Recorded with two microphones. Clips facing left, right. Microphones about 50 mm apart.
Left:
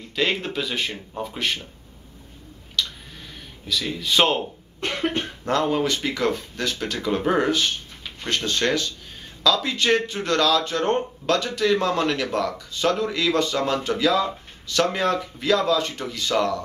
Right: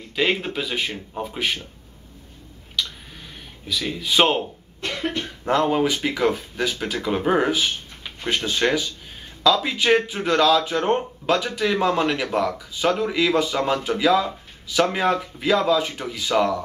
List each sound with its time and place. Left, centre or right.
0.1 s speech: centre
2.8 s a sound: centre
3.6 s speech: centre
4.8 s cough: left
5.4 s speech: centre